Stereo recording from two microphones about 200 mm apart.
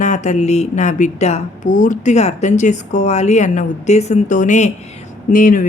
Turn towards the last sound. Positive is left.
turn(degrees=45)  # may be behind; listen again after turning